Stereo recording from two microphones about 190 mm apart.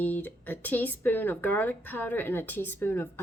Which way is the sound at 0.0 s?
10° left (ahead or behind).